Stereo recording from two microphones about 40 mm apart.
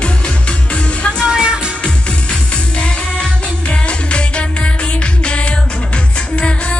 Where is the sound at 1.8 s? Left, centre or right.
Left.